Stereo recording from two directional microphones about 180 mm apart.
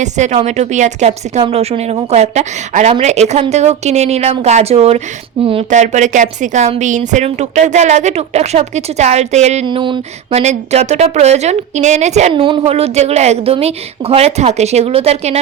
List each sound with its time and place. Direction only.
0.0 s a woman's voice: 40° right (ahead or behind)
9.6 s speech: 25° right (ahead or behind)
10.4 s a woman's voice: 40° right (ahead or behind)